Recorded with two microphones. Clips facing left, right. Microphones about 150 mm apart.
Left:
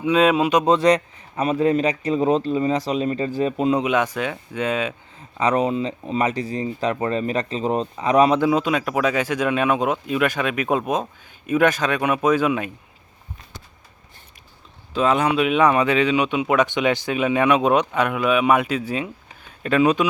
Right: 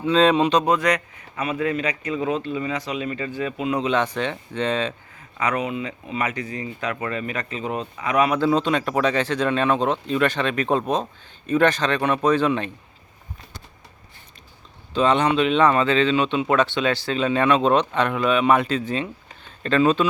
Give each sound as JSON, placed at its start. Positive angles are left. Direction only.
{"t": 0.0, "sound": "speech", "side_deg": 10}
{"t": 0.6, "sound": "a man's voice", "side_deg": 30}
{"t": 3.8, "sound": "speech", "side_deg": 10}
{"t": 5.4, "sound": "a man's voice", "side_deg": 30}
{"t": 8.4, "sound": "speech", "side_deg": 5}
{"t": 14.9, "sound": "speech", "side_deg": 5}